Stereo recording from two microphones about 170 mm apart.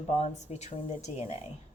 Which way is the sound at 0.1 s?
40° left (ahead or behind).